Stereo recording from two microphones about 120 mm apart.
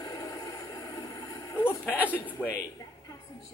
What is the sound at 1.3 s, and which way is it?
Vehicle, 30° left (ahead or behind).